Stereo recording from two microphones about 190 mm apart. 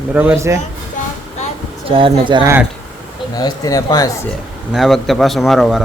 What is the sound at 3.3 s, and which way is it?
Speech, 20° left (ahead or behind).